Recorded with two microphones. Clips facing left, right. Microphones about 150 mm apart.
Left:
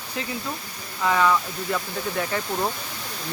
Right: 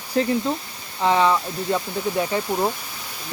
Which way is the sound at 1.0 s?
25° right (ahead or behind).